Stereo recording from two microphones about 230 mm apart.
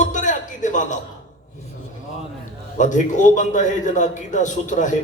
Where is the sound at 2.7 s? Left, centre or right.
Left.